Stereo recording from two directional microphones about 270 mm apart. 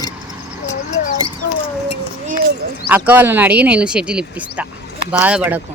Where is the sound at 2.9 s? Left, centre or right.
Centre.